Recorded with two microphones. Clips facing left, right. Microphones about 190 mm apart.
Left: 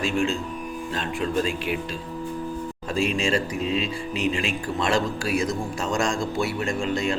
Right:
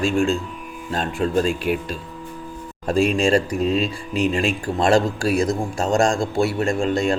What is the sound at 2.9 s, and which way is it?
Speech, 50° right (ahead or behind).